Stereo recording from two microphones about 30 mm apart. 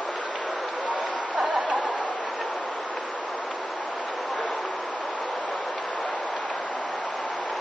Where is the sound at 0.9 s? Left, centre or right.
Right.